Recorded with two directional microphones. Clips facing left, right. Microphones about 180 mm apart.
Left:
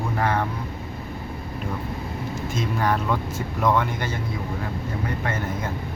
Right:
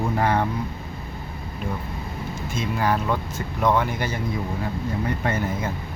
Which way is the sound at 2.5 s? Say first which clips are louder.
Right 1 dB; 5° right (ahead or behind).